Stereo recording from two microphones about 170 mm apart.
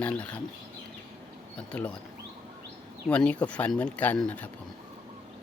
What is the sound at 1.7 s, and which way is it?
Speech, 10° left (ahead or behind).